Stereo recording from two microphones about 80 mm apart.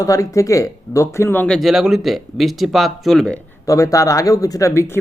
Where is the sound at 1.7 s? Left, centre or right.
Centre.